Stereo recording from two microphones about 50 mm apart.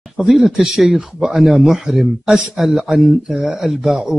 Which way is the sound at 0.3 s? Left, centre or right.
Centre.